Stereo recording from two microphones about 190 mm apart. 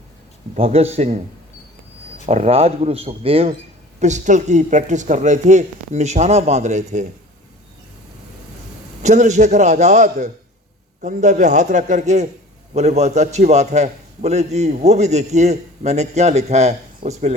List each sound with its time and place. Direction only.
0.5 s a man's voice: 30° right (ahead or behind)
2.2 s a man's voice: 30° right (ahead or behind)
9.0 s a man's voice: 40° right (ahead or behind)